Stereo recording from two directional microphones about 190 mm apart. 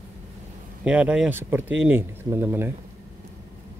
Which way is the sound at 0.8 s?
5° right (ahead or behind).